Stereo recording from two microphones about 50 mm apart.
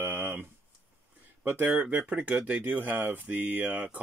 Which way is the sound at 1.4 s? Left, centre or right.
Right.